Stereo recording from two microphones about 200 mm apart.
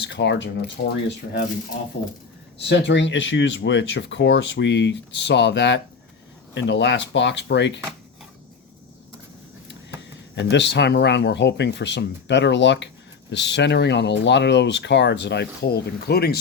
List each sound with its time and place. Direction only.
0.0 s speech: 60° left (ahead or behind)
10.3 s speech: 60° left (ahead or behind)